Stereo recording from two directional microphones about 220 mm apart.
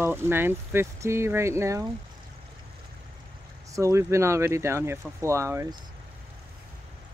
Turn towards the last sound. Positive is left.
turn(degrees=-15)  # may be behind; listen again after turning